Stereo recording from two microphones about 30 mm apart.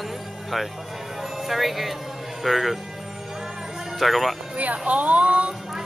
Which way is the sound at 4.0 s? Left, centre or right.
Centre.